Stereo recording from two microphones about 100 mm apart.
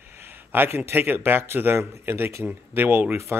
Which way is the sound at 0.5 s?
20° right (ahead or behind).